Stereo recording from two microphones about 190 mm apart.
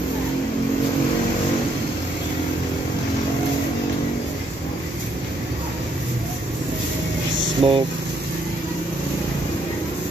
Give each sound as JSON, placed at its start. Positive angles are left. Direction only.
{"t": 7.6, "sound": "speech", "side_deg": -30}